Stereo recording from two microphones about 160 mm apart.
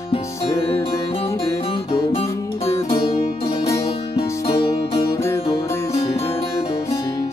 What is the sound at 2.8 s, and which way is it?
Music, 35° left (ahead or behind).